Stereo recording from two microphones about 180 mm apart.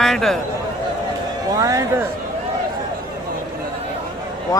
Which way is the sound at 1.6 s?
20° right (ahead or behind).